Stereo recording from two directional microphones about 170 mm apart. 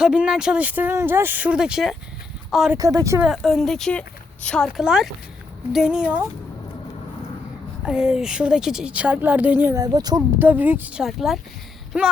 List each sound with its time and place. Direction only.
0.0 s speech: 5° right (ahead or behind)
2.7 s speech: 20° right (ahead or behind)
3.2 s a woman's voice: centre (ahead or behind)
7.9 s a woman's voice: 5° right (ahead or behind)
9.8 s speech: 25° right (ahead or behind); by 12.1 s 5° right (ahead or behind)